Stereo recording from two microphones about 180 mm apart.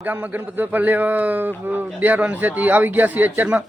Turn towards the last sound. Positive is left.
turn(degrees=-10)  # may be behind; listen again after turning